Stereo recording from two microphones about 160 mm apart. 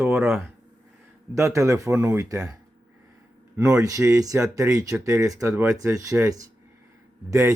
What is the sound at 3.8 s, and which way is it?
Speech, 20° right (ahead or behind).